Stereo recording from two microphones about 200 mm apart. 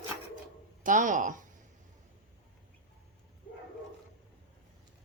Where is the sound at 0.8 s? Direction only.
40° right (ahead or behind).